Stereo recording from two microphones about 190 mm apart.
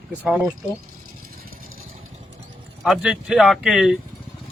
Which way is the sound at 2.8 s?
Centre (ahead or behind).